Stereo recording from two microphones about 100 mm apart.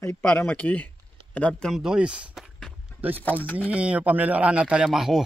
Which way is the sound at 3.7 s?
15° right (ahead or behind).